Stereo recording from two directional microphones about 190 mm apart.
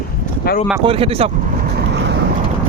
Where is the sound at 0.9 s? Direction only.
30° right (ahead or behind).